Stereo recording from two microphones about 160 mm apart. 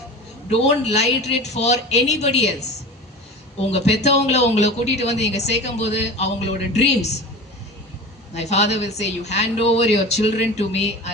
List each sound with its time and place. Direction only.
0.5 s speech: 45° left (ahead or behind)
3.7 s speech: 40° left (ahead or behind)
8.3 s speech: 45° left (ahead or behind)